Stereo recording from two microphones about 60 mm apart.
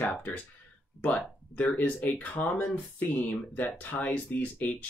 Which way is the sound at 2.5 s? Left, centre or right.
Left.